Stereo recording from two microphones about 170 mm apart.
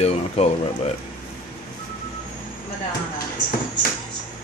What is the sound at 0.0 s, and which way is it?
Speech, 40° left (ahead or behind).